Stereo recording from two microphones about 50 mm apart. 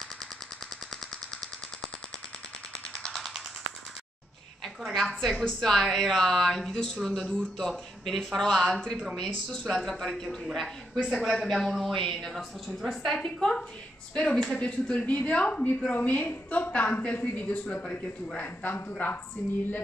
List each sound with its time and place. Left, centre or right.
3.0 s music: centre
4.9 s a woman's voice: centre
13.1 s a woman's voice: centre; by 19.2 s left